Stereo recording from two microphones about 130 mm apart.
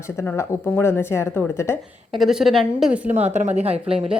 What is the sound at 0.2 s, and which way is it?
A woman's voice, 20° left (ahead or behind).